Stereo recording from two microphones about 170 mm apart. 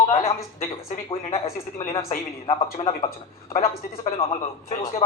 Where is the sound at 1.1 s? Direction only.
35° left (ahead or behind).